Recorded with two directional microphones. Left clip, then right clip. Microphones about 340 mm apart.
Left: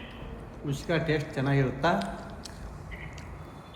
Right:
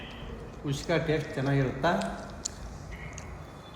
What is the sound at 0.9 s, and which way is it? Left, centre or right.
Speech, centre.